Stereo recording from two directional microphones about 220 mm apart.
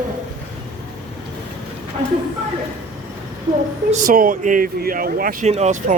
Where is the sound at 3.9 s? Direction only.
40° right (ahead or behind).